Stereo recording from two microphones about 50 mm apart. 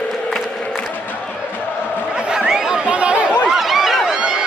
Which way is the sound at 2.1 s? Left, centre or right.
Centre.